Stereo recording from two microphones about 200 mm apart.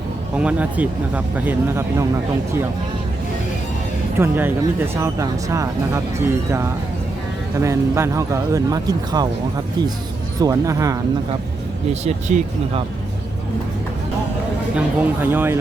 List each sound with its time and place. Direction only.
0.3 s speech: 5° right (ahead or behind)
4.2 s speech: 10° right (ahead or behind)
10.4 s speech: 15° right (ahead or behind)
12.0 s speech: 35° right (ahead or behind)
14.8 s speech: 10° right (ahead or behind)